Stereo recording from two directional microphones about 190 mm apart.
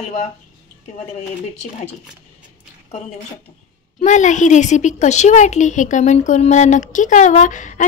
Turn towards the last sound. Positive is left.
turn(degrees=40)  # may be behind; listen again after turning